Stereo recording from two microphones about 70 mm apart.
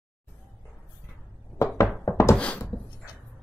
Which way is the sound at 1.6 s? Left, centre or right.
Left.